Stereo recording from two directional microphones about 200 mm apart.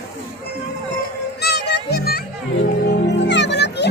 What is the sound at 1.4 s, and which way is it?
Music, 55° left (ahead or behind).